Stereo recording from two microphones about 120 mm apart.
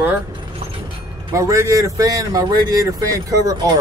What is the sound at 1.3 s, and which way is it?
A man's voice, 25° right (ahead or behind).